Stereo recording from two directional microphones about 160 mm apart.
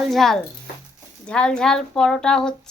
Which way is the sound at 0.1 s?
Centre (ahead or behind).